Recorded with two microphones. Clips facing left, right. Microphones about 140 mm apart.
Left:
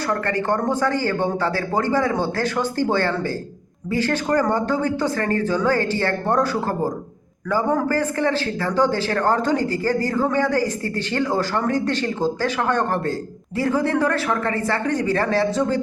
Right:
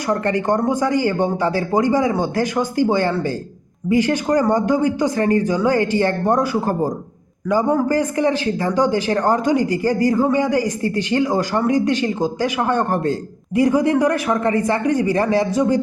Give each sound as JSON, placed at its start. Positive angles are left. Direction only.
{"t": 0.1, "sound": "a man's voice", "side_deg": -20}